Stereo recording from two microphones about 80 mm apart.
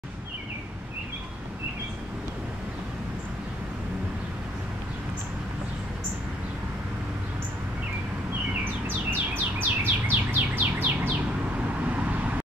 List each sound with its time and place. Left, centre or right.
8.8 s bird: right